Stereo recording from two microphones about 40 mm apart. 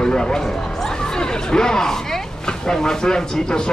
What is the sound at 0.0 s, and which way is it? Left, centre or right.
Speech, centre.